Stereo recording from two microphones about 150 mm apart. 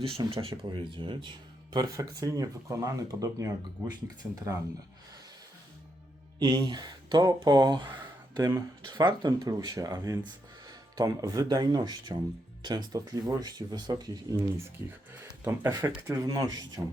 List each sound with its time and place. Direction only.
0.0 s speech: 40° right (ahead or behind)
6.4 s speech: 30° right (ahead or behind)
8.4 s speech: 15° right (ahead or behind)
8.9 s speech: 30° right (ahead or behind)